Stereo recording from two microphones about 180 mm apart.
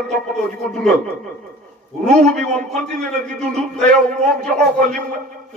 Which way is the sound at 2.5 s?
5° left (ahead or behind).